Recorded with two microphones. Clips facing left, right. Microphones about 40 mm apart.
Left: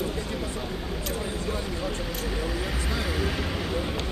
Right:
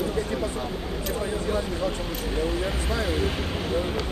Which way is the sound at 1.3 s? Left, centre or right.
Right.